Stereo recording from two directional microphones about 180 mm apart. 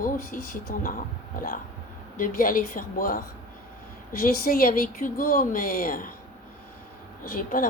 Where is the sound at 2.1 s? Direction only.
50° left (ahead or behind).